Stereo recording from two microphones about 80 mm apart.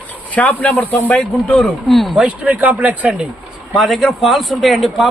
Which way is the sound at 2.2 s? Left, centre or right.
Centre.